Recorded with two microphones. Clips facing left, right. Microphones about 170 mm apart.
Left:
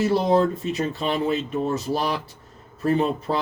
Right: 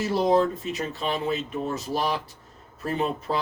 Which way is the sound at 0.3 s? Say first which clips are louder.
Left 2 dB; 30° left (ahead or behind).